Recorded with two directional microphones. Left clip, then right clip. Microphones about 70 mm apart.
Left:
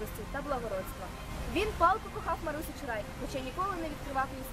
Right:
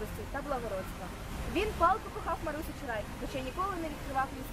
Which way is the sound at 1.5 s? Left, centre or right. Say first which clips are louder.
Left 1 dB; left.